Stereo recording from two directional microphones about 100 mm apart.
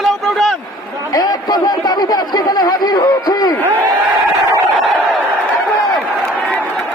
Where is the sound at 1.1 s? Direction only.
40° left (ahead or behind).